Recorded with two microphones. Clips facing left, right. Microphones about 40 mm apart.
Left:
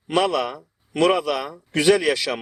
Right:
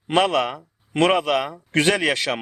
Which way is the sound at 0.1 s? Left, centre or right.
Right.